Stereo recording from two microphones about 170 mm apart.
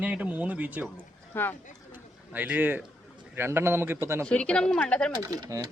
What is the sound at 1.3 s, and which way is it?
Speech, 10° left (ahead or behind).